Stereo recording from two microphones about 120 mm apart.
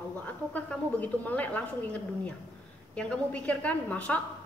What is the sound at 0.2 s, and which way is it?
A woman's voice, 15° left (ahead or behind).